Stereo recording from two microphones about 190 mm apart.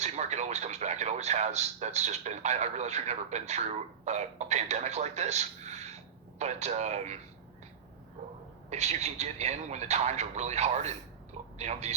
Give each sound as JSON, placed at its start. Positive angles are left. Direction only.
{"t": 0.0, "sound": "a man's voice", "side_deg": -35}
{"t": 8.7, "sound": "a man's voice", "side_deg": -35}